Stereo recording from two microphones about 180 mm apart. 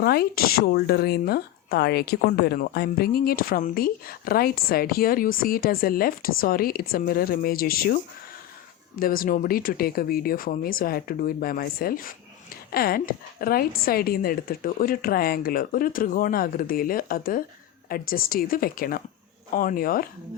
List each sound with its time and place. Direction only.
0.0 s speech: 60° left (ahead or behind)
9.0 s a woman's voice: 50° left (ahead or behind)